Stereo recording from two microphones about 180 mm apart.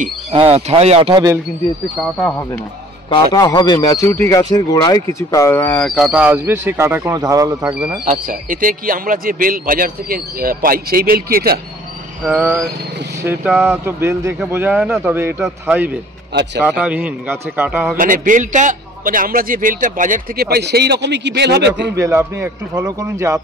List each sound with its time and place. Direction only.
0.3 s speech: 35° right (ahead or behind)
1.1 s speech: 20° right (ahead or behind)
2.1 s speech: 10° left (ahead or behind)
3.1 s a man's voice: 25° left (ahead or behind); by 7.7 s 20° right (ahead or behind)
8.0 s a man's voice: 50° right (ahead or behind)
12.2 s speech: 10° right (ahead or behind)
17.9 s a man's voice: 50° right (ahead or behind); by 21.9 s 70° right (ahead or behind)
21.9 s speech: 15° right (ahead or behind)